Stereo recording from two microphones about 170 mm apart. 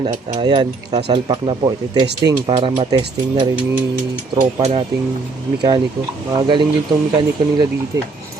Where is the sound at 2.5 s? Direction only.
35° right (ahead or behind).